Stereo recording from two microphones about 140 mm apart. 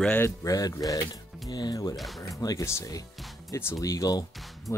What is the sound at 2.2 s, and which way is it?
Speech, 25° left (ahead or behind).